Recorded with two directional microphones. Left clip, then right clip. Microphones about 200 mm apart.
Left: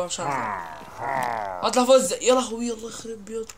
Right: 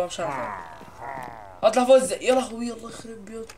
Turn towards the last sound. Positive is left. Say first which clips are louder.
# left 4 dB
turn(degrees=15)  # may be behind; listen again after turning